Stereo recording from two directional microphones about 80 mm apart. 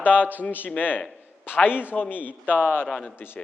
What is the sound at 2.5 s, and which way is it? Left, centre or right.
Speech, right.